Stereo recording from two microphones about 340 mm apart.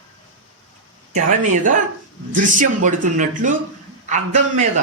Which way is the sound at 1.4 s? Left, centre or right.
Right.